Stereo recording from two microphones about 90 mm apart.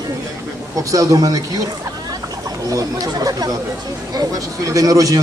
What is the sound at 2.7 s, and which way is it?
Speech, 40° right (ahead or behind).